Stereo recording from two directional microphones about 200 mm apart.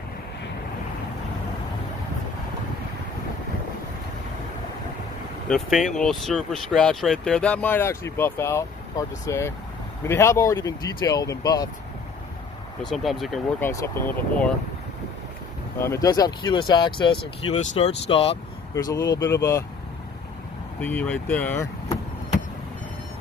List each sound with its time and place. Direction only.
5.5 s speech: centre (ahead or behind); by 11.7 s 20° left (ahead or behind)
12.9 s speech: centre (ahead or behind)
13.6 s speech: 10° left (ahead or behind)
15.8 s speech: 15° left (ahead or behind)
20.8 s speech: 5° left (ahead or behind)